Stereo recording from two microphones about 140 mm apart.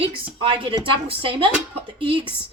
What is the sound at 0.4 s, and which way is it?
A woman's voice, 40° right (ahead or behind).